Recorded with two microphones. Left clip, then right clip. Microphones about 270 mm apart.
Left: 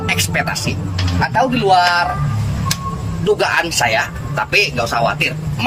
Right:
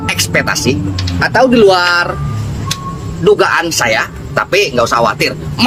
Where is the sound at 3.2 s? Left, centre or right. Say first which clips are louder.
Right 6 dB; centre.